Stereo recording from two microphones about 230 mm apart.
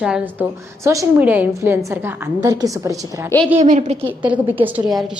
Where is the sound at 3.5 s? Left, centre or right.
Right.